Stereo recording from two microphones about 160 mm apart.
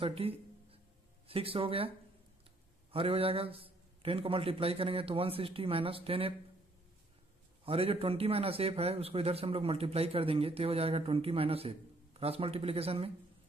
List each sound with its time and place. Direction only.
0.0 s a sound: 35° right (ahead or behind)
1.2 s a man's voice: 35° right (ahead or behind)
7.6 s a man's voice: 35° right (ahead or behind)